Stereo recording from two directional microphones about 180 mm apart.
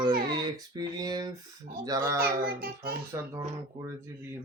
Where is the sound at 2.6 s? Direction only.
60° right (ahead or behind).